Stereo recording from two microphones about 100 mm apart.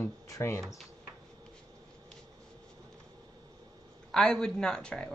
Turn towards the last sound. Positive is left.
turn(degrees=5)  # may be behind; listen again after turning